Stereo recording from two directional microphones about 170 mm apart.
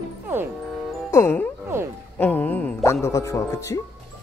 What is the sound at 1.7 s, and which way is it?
Music, 15° right (ahead or behind).